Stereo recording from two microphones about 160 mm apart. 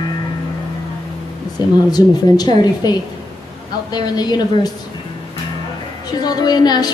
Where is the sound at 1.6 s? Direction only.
25° left (ahead or behind).